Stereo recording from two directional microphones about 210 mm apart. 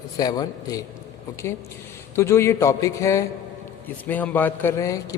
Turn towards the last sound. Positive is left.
turn(degrees=15)  # may be behind; listen again after turning